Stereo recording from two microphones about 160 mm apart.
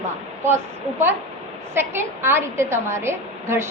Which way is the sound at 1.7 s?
15° right (ahead or behind).